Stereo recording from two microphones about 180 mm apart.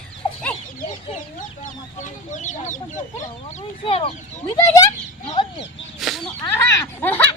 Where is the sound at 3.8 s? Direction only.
30° left (ahead or behind).